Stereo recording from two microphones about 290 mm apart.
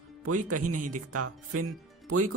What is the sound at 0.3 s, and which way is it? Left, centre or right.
Speech, right.